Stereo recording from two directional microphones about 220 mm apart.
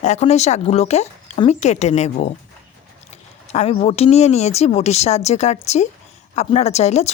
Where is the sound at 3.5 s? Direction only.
30° left (ahead or behind).